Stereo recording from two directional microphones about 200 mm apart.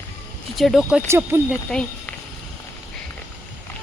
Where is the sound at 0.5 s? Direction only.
Centre (ahead or behind).